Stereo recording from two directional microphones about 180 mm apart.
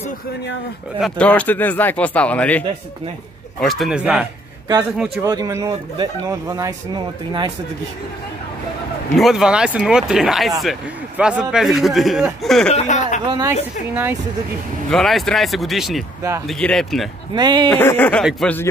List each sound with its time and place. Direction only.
1.0 s speech: 5° left (ahead or behind)
3.6 s speech: centre (ahead or behind)
5.2 s speech: 20° right (ahead or behind)
9.1 s speech: centre (ahead or behind)
12.7 s a man's voice: 40° left (ahead or behind)
13.3 s speech: 20° right (ahead or behind)
14.9 s speech: centre (ahead or behind)
17.4 s speech: 25° right (ahead or behind)
17.6 s speech: 10° left (ahead or behind)